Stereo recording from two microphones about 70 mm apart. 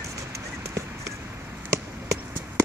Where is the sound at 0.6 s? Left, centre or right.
Right.